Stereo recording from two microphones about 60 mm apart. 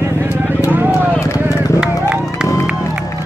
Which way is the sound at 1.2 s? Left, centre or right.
Left.